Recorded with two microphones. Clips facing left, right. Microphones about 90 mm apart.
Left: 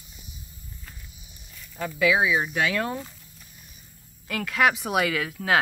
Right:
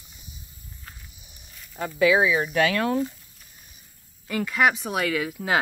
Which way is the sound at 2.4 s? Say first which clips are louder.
Right 3 dB; 60° right (ahead or behind).